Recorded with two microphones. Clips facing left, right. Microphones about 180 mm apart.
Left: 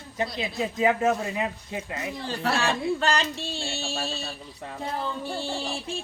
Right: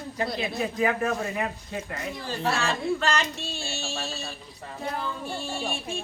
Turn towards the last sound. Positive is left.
turn(degrees=30)  # may be behind; listen again after turning